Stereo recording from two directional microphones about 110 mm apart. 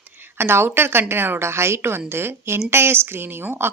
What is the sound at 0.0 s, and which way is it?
A woman's voice, 20° right (ahead or behind).